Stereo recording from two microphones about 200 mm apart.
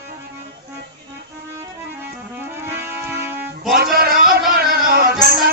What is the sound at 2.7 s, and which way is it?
Music, 10° right (ahead or behind).